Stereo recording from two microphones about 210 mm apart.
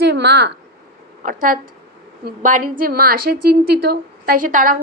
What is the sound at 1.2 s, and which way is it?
A woman's voice, 40° right (ahead or behind).